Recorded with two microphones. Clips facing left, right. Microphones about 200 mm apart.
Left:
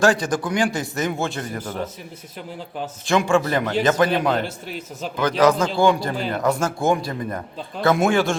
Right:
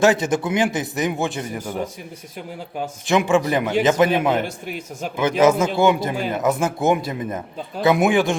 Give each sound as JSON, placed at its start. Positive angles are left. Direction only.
{"t": 0.0, "sound": "a man's voice", "side_deg": -20}
{"t": 3.1, "sound": "a man's voice", "side_deg": -20}